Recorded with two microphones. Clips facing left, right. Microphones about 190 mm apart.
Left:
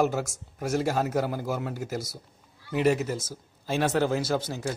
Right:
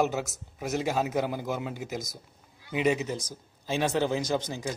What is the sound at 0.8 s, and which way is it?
Speech, 10° right (ahead or behind).